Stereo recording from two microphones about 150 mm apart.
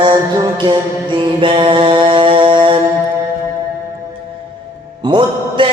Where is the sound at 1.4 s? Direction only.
35° right (ahead or behind).